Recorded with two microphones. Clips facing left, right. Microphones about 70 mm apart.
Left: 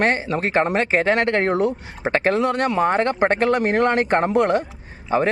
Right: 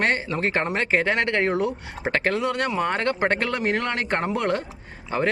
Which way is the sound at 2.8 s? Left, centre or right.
Left.